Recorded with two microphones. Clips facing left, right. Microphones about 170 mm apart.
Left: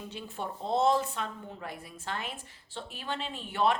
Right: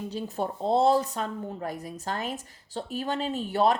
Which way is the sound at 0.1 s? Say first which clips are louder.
Right 7 dB; 40° right (ahead or behind).